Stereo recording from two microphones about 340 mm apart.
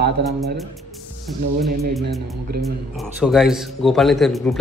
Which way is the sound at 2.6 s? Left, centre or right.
Centre.